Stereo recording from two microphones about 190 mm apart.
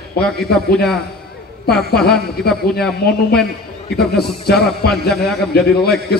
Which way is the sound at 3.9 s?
55° left (ahead or behind).